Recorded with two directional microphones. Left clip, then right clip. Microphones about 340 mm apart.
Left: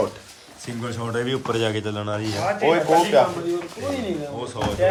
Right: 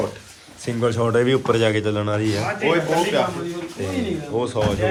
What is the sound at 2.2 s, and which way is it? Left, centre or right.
Speech, left.